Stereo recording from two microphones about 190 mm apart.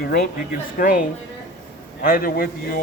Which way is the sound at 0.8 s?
45° left (ahead or behind).